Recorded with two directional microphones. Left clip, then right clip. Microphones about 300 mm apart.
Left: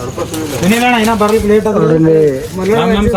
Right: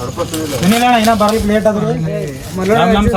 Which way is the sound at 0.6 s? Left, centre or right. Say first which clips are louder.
Even; centre.